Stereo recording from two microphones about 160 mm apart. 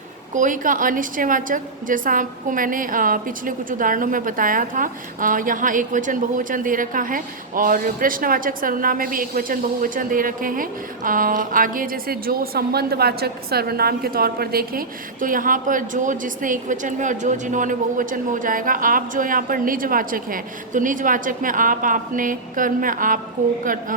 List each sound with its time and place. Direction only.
0.3 s a woman's voice: 55° right (ahead or behind)